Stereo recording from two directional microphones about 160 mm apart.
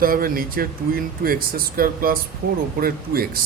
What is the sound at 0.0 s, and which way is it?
Speech, 65° right (ahead or behind).